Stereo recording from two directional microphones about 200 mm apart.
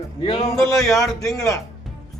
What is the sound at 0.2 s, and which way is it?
A man's voice, 20° left (ahead or behind).